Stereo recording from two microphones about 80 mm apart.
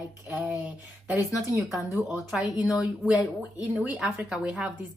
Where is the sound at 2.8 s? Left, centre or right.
Centre.